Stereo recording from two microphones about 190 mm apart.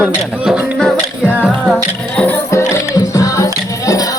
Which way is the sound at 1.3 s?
5° right (ahead or behind).